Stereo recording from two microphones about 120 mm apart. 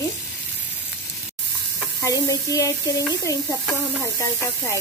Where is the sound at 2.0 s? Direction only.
25° left (ahead or behind).